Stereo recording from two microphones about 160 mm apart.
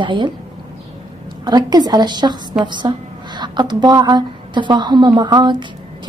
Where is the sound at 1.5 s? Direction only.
25° right (ahead or behind).